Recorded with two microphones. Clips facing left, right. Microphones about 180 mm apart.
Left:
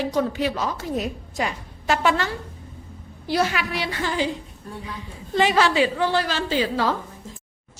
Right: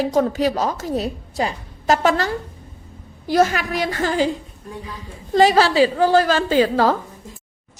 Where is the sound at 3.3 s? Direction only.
45° right (ahead or behind).